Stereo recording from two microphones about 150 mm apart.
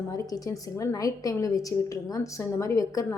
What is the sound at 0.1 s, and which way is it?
Speech, 25° left (ahead or behind).